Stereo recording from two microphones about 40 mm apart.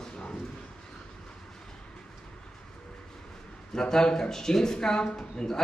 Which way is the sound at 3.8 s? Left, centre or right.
Centre.